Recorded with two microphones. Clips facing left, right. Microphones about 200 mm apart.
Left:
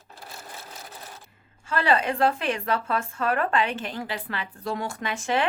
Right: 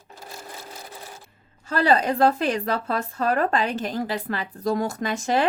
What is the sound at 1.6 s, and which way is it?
Speech, 40° right (ahead or behind).